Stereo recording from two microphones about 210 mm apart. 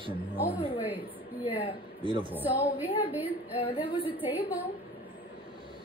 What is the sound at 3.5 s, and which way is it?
Speech, 25° left (ahead or behind).